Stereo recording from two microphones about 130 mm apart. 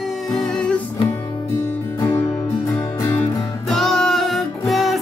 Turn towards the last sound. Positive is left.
turn(degrees=0)  # may be behind; listen again after turning